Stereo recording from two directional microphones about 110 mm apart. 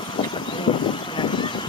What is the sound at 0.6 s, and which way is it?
Vehicle, 45° left (ahead or behind).